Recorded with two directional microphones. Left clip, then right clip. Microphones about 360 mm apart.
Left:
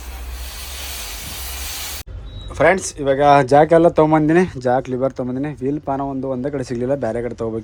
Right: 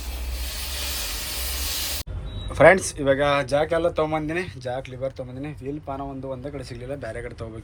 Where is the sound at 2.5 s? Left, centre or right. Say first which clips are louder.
Even; centre; by 6.7 s left.